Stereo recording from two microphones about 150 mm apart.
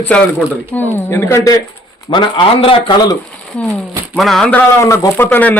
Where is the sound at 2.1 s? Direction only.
35° left (ahead or behind).